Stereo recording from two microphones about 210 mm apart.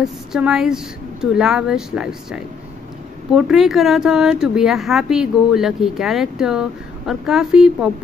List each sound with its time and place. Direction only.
0.0 s a woman's voice: centre (ahead or behind)